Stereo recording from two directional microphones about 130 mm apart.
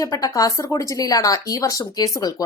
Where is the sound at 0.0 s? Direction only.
25° left (ahead or behind).